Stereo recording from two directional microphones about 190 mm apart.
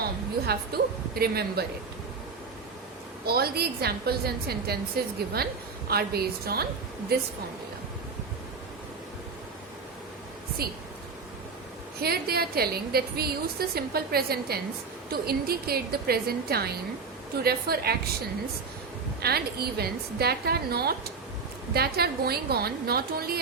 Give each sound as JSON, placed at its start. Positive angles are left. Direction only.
{"t": 0.4, "sound": "a woman's voice", "side_deg": -55}
{"t": 3.2, "sound": "a woman's voice", "side_deg": -55}
{"t": 11.9, "sound": "a woman's voice", "side_deg": -55}
{"t": 19.2, "sound": "a woman's voice", "side_deg": -55}